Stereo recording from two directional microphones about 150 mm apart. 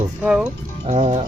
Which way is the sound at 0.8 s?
50° right (ahead or behind).